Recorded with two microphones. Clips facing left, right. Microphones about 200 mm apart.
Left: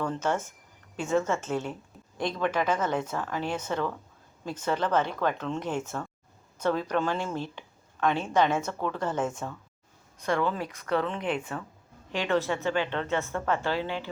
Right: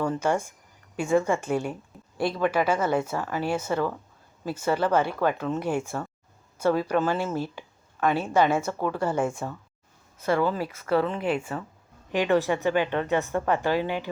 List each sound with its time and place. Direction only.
0.0 s speech: 10° right (ahead or behind)